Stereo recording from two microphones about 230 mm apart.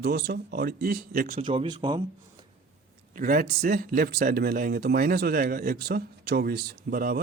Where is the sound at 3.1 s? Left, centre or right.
Right.